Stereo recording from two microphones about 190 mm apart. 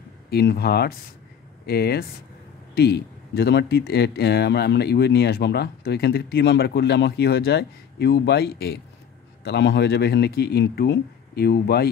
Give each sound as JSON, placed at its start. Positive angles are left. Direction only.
{"t": 0.3, "sound": "speech", "side_deg": 55}